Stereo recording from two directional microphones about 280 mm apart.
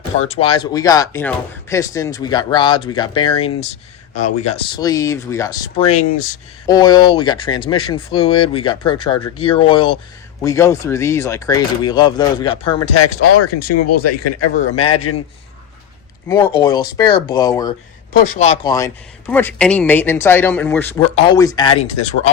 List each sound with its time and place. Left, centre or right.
0.3 s speech: centre
6.7 s speech: centre
13.4 s a man's voice: left
16.3 s speech: centre
18.1 s speech: left
19.3 s speech: centre; by 22.3 s left